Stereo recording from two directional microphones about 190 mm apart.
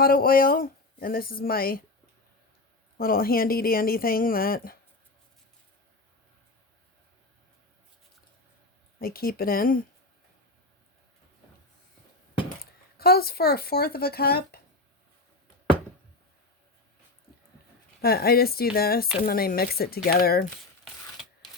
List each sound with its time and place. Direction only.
0.0 s speech: 50° left (ahead or behind)
3.0 s speech: 50° left (ahead or behind)
9.0 s speech: 50° left (ahead or behind)
13.0 s speech: 55° left (ahead or behind)
18.0 s speech: 55° left (ahead or behind)